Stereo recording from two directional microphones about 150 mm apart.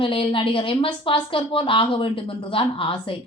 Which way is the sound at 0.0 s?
35° left (ahead or behind).